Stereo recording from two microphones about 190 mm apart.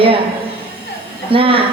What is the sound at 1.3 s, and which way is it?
Speech, 30° right (ahead or behind).